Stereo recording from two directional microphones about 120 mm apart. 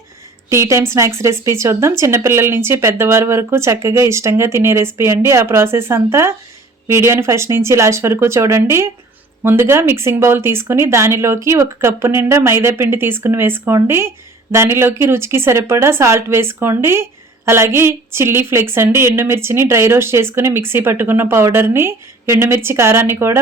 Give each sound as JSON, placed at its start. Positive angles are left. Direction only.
{"t": 0.5, "sound": "speech", "side_deg": -25}